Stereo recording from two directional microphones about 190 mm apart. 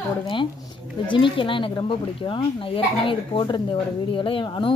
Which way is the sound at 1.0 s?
25° left (ahead or behind).